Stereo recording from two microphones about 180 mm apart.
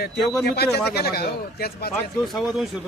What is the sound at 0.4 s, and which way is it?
Speech, 65° left (ahead or behind).